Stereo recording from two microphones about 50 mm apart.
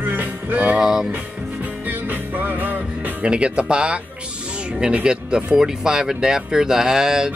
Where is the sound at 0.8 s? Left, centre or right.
Centre.